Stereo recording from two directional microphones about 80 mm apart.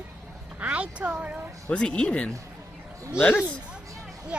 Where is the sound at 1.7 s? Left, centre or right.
Centre.